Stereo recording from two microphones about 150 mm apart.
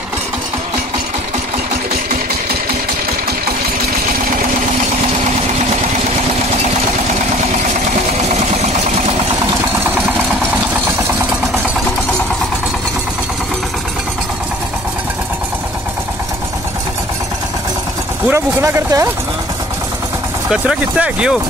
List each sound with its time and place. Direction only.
18.3 s speech: 15° right (ahead or behind)
20.4 s speech: 5° right (ahead or behind)